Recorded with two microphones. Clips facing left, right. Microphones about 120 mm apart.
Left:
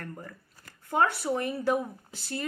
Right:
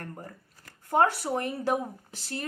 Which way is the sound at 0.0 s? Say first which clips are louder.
Even; 35° right (ahead or behind).